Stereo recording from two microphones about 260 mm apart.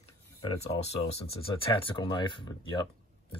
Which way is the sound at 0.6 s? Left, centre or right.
Left.